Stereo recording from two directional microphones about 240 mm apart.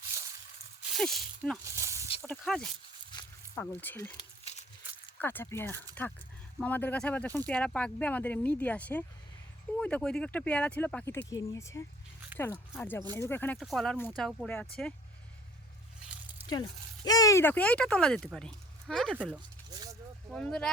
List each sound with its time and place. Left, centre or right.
0.9 s speech: centre
1.7 s a sound: centre
2.2 s speech: centre
3.1 s zipper: centre
4.5 s a sound: left
5.2 s speech: centre
16.5 s speech: centre